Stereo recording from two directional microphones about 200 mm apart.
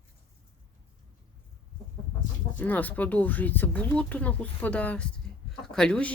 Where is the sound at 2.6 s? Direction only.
10° left (ahead or behind).